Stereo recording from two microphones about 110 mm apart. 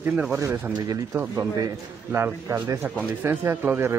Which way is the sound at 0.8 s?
30° right (ahead or behind).